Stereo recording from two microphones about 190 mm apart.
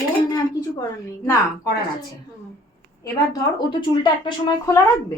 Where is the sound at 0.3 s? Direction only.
20° left (ahead or behind).